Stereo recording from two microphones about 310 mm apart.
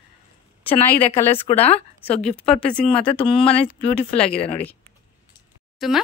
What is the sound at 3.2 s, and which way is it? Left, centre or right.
Speech, centre.